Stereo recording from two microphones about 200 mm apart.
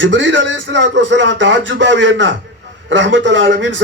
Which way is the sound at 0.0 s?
65° right (ahead or behind).